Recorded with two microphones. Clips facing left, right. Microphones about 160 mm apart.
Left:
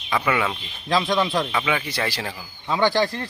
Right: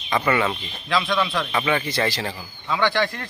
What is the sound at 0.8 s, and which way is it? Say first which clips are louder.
Speech: left 2 dB; 35° left (ahead or behind).